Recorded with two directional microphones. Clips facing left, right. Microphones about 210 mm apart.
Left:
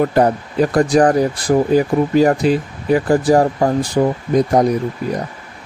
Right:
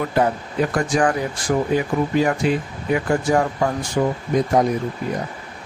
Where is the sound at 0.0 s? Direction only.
40° left (ahead or behind).